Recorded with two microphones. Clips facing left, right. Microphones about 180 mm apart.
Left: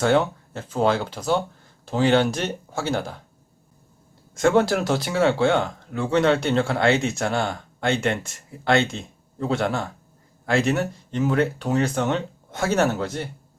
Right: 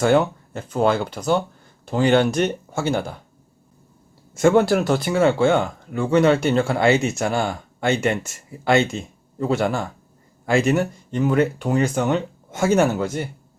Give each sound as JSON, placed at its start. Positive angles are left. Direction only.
{"t": 0.0, "sound": "speech", "side_deg": 0}
{"t": 4.4, "sound": "speech", "side_deg": -5}